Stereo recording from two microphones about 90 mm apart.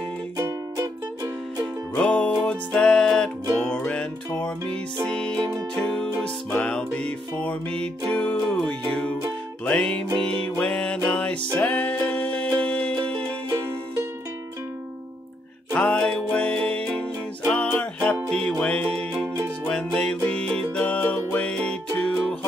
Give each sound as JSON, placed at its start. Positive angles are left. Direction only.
{"t": 0.4, "sound": "music", "side_deg": -40}
{"t": 2.0, "sound": "music", "side_deg": 15}
{"t": 9.8, "sound": "music", "side_deg": 10}
{"t": 10.1, "sound": "music", "side_deg": -80}
{"t": 10.4, "sound": "music", "side_deg": 10}
{"t": 15.8, "sound": "music", "side_deg": 10}